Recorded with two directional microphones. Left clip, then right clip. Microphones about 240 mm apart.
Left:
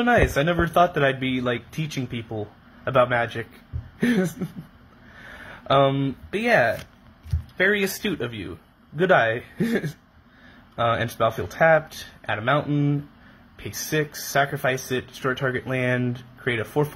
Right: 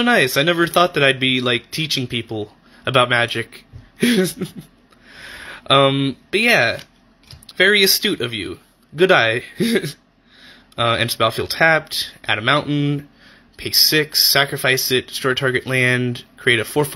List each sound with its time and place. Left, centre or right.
0.0 s speech: right
5.5 s speech: right